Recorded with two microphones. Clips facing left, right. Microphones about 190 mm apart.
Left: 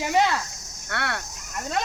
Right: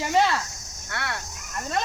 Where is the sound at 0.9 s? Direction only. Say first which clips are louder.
Left 3 dB; 60° left (ahead or behind).